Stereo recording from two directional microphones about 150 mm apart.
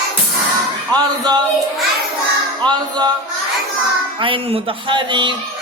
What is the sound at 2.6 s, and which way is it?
Music, 30° right (ahead or behind).